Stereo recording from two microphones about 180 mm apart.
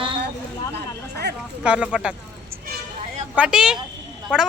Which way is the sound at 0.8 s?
65° right (ahead or behind).